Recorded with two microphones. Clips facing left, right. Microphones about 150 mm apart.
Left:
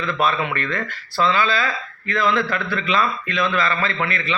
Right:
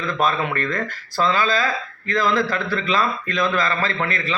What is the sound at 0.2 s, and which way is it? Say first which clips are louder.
A man's voice: right 1 dB; 40° right (ahead or behind).